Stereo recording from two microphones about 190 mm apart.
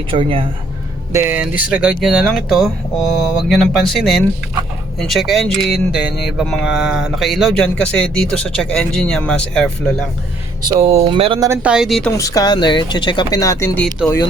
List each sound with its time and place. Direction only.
0.1 s speech: 30° right (ahead or behind)
1.1 s speech: 10° right (ahead or behind)
10.7 s speech: 30° right (ahead or behind)
11.4 s speech: 10° right (ahead or behind)
12.1 s speech: 20° left (ahead or behind)